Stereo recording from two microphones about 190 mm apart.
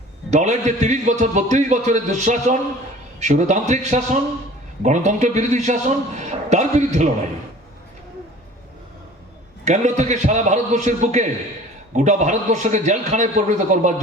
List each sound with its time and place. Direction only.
0.3 s a man's voice: 40° right (ahead or behind)
9.6 s a man's voice: 40° right (ahead or behind)